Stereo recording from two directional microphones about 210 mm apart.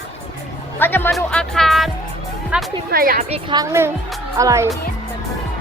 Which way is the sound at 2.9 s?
45° right (ahead or behind).